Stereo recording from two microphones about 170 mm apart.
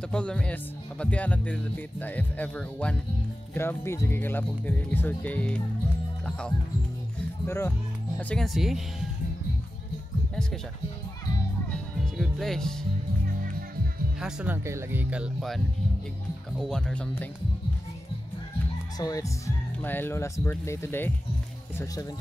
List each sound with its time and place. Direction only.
0.1 s speech: 5° left (ahead or behind)
7.4 s speech: 15° left (ahead or behind); by 8.8 s centre (ahead or behind)
12.0 s music: centre (ahead or behind)
13.4 s music: 55° right (ahead or behind)
14.2 s speech: 10° right (ahead or behind); by 17.3 s 10° left (ahead or behind)
18.9 s speech: 20° left (ahead or behind)